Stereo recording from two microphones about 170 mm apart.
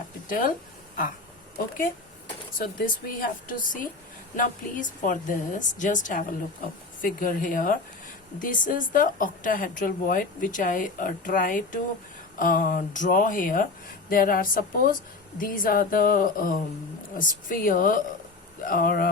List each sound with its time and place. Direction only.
0.3 s a woman's voice: 50° left (ahead or behind)
2.8 s a woman's voice: 55° left (ahead or behind)